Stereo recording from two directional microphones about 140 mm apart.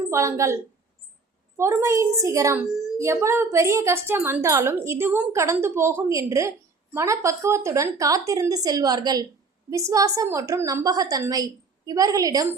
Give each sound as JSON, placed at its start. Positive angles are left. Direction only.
{"t": 0.1, "sound": "a woman's voice", "side_deg": -20}
{"t": 1.5, "sound": "a woman's voice", "side_deg": -20}